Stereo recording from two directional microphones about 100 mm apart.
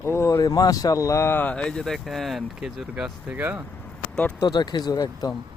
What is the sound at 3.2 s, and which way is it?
Speech, 15° right (ahead or behind).